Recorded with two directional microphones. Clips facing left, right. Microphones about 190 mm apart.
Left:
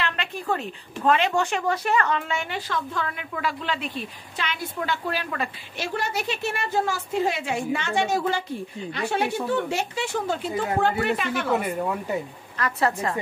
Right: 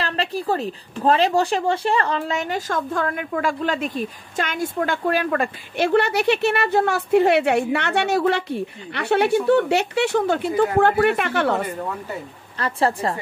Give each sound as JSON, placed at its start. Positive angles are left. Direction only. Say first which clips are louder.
{"t": 0.0, "sound": "a woman's voice", "louder": "right 5 dB", "side_deg": -35}
{"t": 12.5, "sound": "a woman's voice", "louder": "right 3 dB", "side_deg": -30}